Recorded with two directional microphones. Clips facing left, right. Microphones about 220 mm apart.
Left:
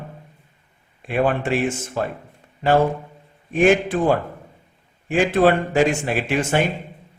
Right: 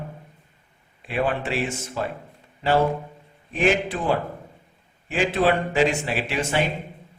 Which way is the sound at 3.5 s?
50° left (ahead or behind).